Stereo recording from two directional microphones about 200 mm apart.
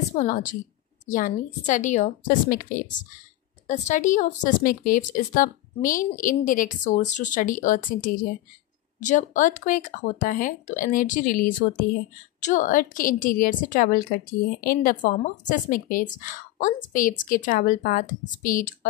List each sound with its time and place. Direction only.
0.1 s a woman's voice: 40° left (ahead or behind)